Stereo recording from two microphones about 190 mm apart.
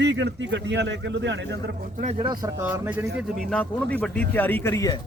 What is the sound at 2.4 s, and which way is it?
Speech, 10° right (ahead or behind).